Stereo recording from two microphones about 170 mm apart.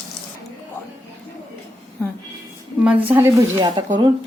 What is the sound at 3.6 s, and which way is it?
Speech, 30° right (ahead or behind).